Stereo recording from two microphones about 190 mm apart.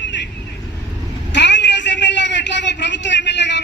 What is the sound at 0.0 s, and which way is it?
Vehicle, 70° left (ahead or behind).